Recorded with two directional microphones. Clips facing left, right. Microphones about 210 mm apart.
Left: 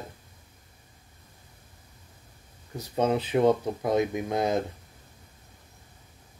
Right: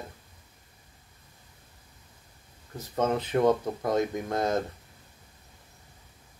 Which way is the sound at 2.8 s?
15° left (ahead or behind).